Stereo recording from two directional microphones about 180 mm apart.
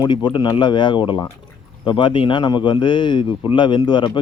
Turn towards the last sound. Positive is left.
turn(degrees=25)  # may be behind; listen again after turning